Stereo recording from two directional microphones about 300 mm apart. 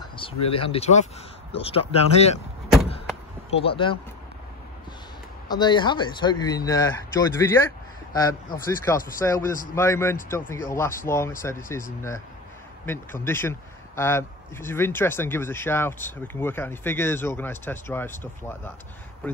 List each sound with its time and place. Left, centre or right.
0.1 s speech: centre
3.4 s a man's voice: centre
5.5 s a man's voice: centre